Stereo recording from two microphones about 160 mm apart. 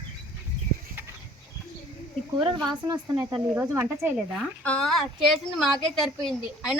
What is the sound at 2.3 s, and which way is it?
Speech, 25° right (ahead or behind).